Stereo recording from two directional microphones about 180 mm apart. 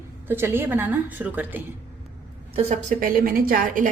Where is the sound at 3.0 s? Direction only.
50° right (ahead or behind).